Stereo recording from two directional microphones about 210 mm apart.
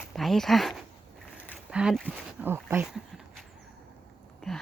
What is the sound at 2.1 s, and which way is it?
Speech, 5° right (ahead or behind).